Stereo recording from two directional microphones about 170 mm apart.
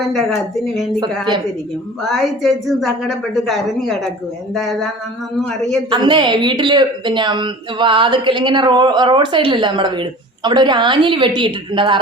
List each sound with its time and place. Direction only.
0.0 s speech: centre (ahead or behind)
2.0 s speech: centre (ahead or behind)
5.9 s speech: 25° right (ahead or behind)